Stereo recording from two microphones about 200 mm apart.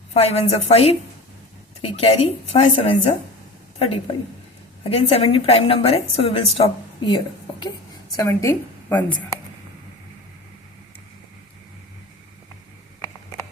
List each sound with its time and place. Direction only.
0.1 s a woman's voice: 30° left (ahead or behind)
8.1 s a woman's voice: 15° left (ahead or behind)